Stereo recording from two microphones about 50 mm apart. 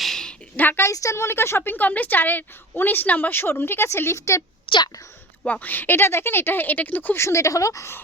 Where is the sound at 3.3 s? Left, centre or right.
Left.